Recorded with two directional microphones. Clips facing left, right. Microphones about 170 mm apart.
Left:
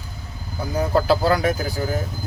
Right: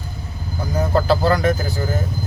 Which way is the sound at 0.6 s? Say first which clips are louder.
Right 1 dB; 10° left (ahead or behind).